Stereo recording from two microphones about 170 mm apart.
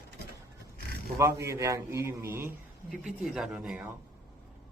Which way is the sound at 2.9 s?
Centre (ahead or behind).